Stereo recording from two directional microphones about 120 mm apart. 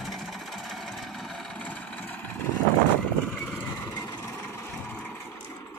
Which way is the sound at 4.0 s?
25° left (ahead or behind).